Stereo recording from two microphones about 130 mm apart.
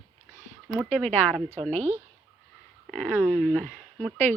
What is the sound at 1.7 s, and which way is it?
Speech, 55° right (ahead or behind).